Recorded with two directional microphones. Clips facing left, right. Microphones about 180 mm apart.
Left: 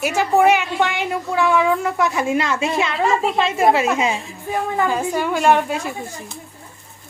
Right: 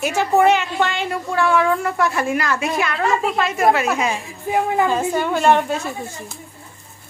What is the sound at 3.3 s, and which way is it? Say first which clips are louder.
Speech: left 2 dB; 25° left (ahead or behind).